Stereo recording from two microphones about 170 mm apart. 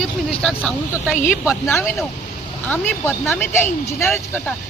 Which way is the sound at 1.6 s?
15° left (ahead or behind).